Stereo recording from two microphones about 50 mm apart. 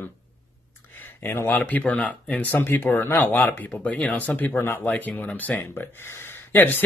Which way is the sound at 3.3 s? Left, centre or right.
Left.